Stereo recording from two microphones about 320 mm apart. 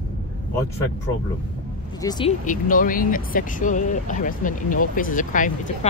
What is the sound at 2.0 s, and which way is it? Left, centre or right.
Speech, centre.